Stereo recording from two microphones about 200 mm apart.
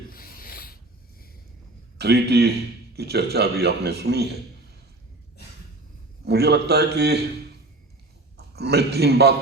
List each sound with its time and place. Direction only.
0.1 s rub: 45° left (ahead or behind)
2.0 s speech: 55° right (ahead or behind)
6.2 s speech: 55° right (ahead or behind)
8.4 s a man's voice: 55° right (ahead or behind)